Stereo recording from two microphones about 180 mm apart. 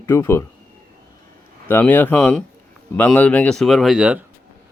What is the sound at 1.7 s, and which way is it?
Speech, 10° left (ahead or behind).